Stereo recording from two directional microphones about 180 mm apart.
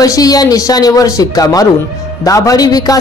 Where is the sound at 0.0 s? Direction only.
20° left (ahead or behind).